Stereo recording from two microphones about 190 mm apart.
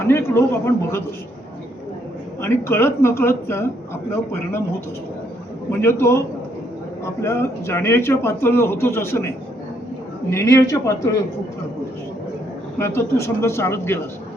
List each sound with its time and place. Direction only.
0.1 s a man's voice: 15° left (ahead or behind)
2.4 s a man's voice: 10° left (ahead or behind)
5.8 s a man's voice: 15° left (ahead or behind)
12.8 s a man's voice: 15° left (ahead or behind)